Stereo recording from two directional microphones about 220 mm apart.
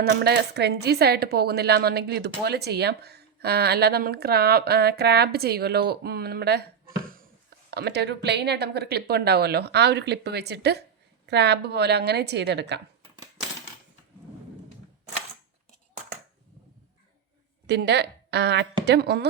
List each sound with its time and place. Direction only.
0.0 s a woman's voice: 50° right (ahead or behind)
7.7 s a woman's voice: 50° right (ahead or behind)
17.7 s a woman's voice: 50° right (ahead or behind)